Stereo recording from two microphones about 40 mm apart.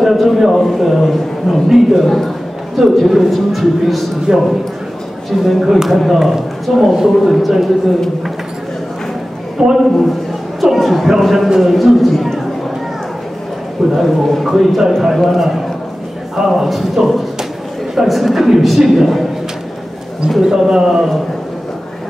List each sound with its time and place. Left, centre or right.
0.0 s a man's voice: centre
9.6 s speech: centre
10.6 s speech: centre
13.9 s a man's voice: centre
20.2 s speech: centre